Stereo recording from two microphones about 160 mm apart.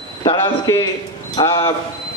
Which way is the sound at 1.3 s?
35° left (ahead or behind).